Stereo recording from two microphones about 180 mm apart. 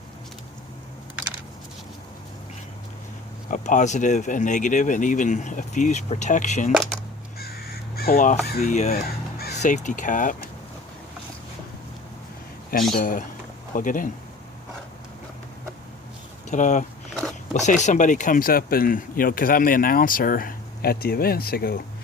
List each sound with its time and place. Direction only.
3.5 s speech: 45° left (ahead or behind)
6.7 s speech: centre (ahead or behind)
7.9 s speech: 55° left (ahead or behind)
13.0 s speech: 50° left (ahead or behind)
16.5 s speech: 45° left (ahead or behind); by 21.8 s 60° left (ahead or behind)